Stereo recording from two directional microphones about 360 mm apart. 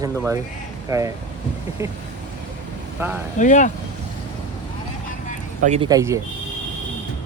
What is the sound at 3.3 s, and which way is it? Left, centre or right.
Speech, left.